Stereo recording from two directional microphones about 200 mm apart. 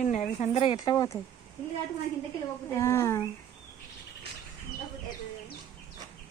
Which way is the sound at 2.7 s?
15° left (ahead or behind).